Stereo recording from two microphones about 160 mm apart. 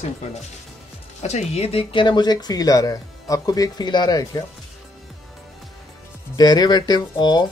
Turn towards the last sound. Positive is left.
turn(degrees=25)  # may be behind; listen again after turning